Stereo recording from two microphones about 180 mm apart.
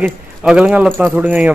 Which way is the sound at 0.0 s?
5° right (ahead or behind).